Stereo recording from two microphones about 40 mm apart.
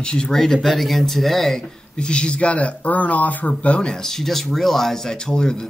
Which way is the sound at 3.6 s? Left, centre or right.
Left.